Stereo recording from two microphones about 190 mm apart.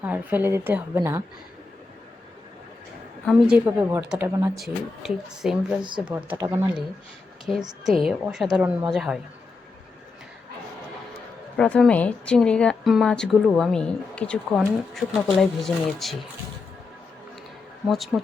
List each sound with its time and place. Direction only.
0.0 s a woman's voice: 10° right (ahead or behind)
3.2 s a woman's voice: 5° right (ahead or behind)
4.5 s a woman's voice: centre (ahead or behind)
7.5 s a woman's voice: centre (ahead or behind)
11.5 s a woman's voice: 5° left (ahead or behind)
17.8 s a woman's voice: centre (ahead or behind)